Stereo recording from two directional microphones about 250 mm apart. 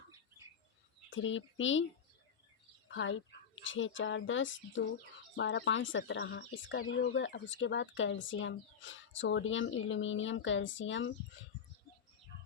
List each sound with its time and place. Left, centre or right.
1.1 s speech: left
2.9 s speech: left